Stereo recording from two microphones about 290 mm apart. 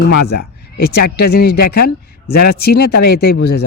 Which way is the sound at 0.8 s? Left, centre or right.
Left.